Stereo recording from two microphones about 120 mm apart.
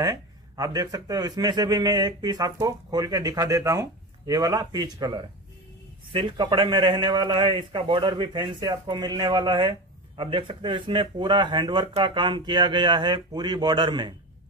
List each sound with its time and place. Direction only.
0.0 s speech: 30° right (ahead or behind)